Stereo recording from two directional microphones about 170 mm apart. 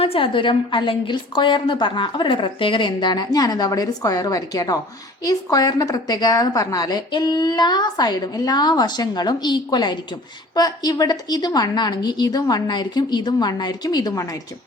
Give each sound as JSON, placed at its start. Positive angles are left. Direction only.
{"t": 0.0, "sound": "a woman's voice", "side_deg": 35}